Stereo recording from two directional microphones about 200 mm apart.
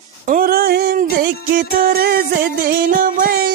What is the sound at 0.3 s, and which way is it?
Music, 45° right (ahead or behind).